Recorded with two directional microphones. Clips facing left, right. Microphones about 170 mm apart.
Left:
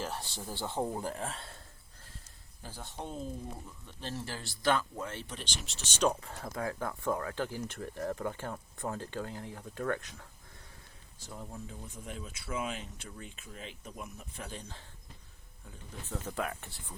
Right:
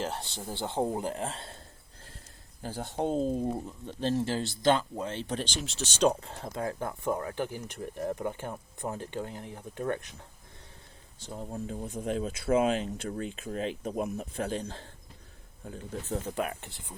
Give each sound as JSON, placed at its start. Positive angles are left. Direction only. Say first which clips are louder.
{"t": 0.0, "sound": "speech", "louder": "right 4 dB", "side_deg": -25}
{"t": 2.6, "sound": "speech", "louder": "right 11 dB", "side_deg": -60}
{"t": 4.0, "sound": "speech", "louder": "right 11 dB", "side_deg": -25}
{"t": 5.3, "sound": "speech", "louder": "right 10 dB", "side_deg": -90}
{"t": 6.0, "sound": "speech", "louder": "right 4 dB", "side_deg": -25}
{"t": 11.7, "sound": "speech", "louder": "right 11 dB", "side_deg": -45}
{"t": 12.0, "sound": "speech", "louder": "right 14 dB", "side_deg": -90}
{"t": 16.2, "sound": "speech", "louder": "right 4 dB", "side_deg": -20}